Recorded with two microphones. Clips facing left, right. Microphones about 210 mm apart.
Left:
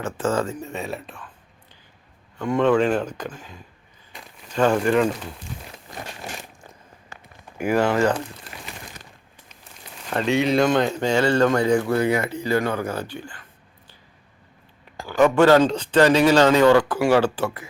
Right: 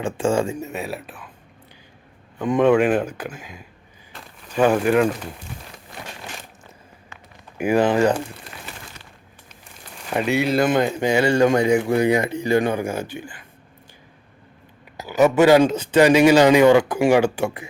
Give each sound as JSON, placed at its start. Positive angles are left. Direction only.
{"t": 0.0, "sound": "speech", "side_deg": -15}
{"t": 2.4, "sound": "speech", "side_deg": -15}
{"t": 4.1, "sound": "a sound", "side_deg": -5}
{"t": 7.6, "sound": "speech", "side_deg": -15}
{"t": 10.1, "sound": "speech", "side_deg": -10}
{"t": 14.9, "sound": "speech", "side_deg": -10}